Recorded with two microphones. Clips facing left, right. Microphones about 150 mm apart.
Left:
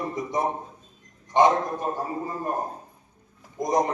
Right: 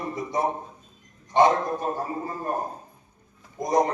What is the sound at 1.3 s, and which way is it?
Speech, 20° left (ahead or behind).